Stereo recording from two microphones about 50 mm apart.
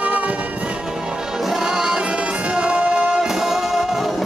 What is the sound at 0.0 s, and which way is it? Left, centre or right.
Music, right.